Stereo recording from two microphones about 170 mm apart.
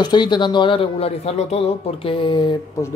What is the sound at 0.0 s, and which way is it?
Speech, 25° left (ahead or behind).